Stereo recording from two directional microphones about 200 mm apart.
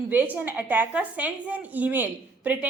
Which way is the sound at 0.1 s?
10° right (ahead or behind).